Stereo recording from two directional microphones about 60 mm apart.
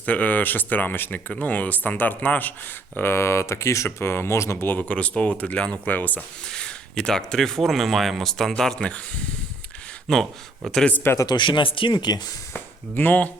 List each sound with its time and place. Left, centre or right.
0.0 s speech: left
2.9 s speech: left
4.8 s speech: left
6.5 s speech: centre
10.1 s speech: centre
10.9 s speech: left
12.1 s speech: left
12.5 s speech: left